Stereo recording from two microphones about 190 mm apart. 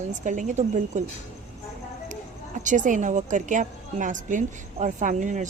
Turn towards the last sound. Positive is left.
turn(degrees=-40)  # may be behind; listen again after turning